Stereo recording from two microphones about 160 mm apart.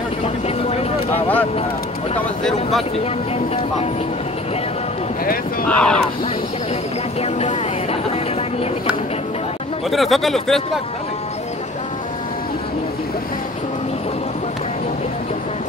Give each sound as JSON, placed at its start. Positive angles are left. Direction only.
{"t": 0.7, "sound": "a sound", "side_deg": 40}
{"t": 5.2, "sound": "speech", "side_deg": 65}
{"t": 5.7, "sound": "speech", "side_deg": 5}
{"t": 7.2, "sound": "music", "side_deg": 40}
{"t": 9.8, "sound": "speech", "side_deg": 0}